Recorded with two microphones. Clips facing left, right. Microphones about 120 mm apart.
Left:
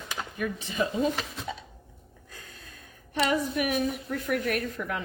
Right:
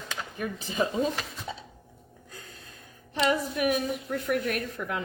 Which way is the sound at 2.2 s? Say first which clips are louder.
Right 1 dB; 25° right (ahead or behind).